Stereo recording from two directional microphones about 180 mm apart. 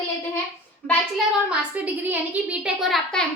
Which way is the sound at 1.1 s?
5° right (ahead or behind).